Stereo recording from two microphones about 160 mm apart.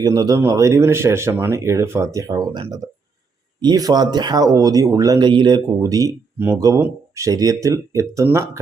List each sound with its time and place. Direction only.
0.0 s speech: 25° right (ahead or behind)